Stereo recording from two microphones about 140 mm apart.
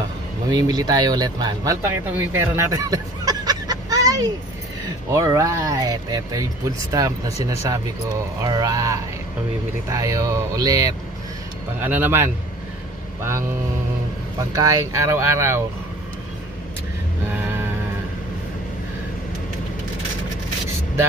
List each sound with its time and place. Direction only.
0.5 s speech: 30° right (ahead or behind)
11.8 s a man's voice: 15° right (ahead or behind)
14.5 s speech: 25° right (ahead or behind)